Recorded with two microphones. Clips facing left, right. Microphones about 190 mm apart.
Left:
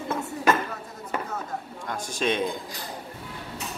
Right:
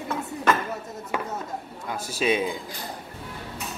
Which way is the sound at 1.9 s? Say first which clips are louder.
Right 2 dB; 5° right (ahead or behind).